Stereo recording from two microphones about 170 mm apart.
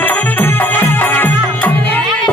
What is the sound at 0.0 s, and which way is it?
Music, 10° left (ahead or behind).